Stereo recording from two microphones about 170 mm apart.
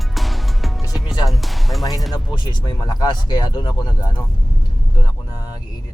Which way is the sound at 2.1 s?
25° left (ahead or behind).